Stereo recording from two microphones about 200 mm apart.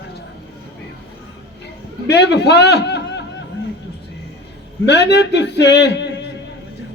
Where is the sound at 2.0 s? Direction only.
55° left (ahead or behind).